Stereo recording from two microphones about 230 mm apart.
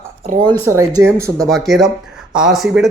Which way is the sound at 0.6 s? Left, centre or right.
Centre.